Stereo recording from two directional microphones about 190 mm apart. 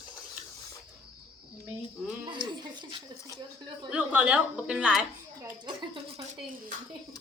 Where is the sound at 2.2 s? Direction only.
25° right (ahead or behind).